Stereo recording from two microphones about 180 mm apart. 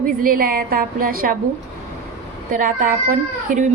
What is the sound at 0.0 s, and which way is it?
Speech, 50° right (ahead or behind).